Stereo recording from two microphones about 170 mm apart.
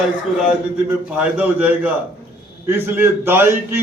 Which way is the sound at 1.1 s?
10° right (ahead or behind).